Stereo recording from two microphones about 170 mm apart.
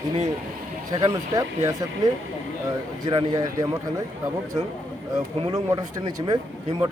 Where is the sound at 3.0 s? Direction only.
25° right (ahead or behind).